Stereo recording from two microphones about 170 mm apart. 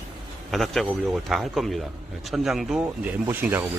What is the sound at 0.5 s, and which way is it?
A man's voice, centre (ahead or behind).